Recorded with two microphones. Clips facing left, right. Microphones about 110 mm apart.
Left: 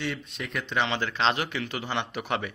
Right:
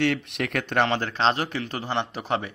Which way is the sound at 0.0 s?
75° right (ahead or behind).